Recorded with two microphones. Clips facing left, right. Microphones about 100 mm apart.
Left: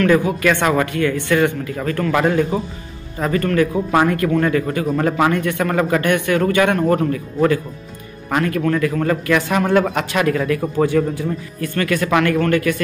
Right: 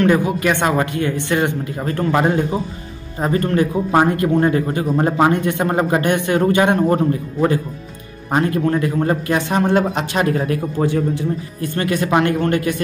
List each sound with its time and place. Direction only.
0.0 s speech: 25° right (ahead or behind)
8.3 s a man's voice: 25° right (ahead or behind)